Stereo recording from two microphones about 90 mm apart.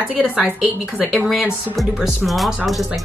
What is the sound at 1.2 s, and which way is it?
Speech, centre (ahead or behind).